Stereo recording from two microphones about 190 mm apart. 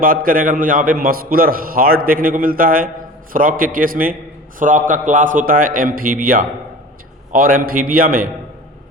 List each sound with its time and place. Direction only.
0.0 s a man's voice: 45° right (ahead or behind)